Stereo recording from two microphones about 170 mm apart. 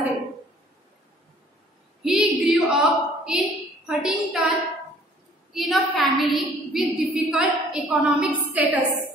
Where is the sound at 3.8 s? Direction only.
Centre (ahead or behind).